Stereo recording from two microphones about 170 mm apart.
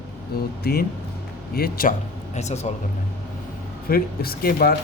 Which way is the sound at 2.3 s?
40° left (ahead or behind).